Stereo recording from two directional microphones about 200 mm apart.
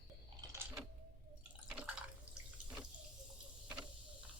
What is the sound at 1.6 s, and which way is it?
Drip, 5° right (ahead or behind).